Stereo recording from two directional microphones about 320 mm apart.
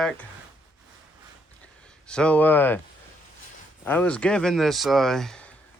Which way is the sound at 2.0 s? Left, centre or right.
Centre.